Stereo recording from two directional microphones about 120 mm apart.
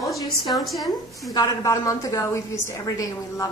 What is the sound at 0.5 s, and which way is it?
Speech, centre (ahead or behind).